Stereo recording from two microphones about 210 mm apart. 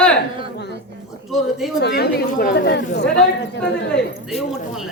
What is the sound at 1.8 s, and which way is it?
Speech, 50° left (ahead or behind).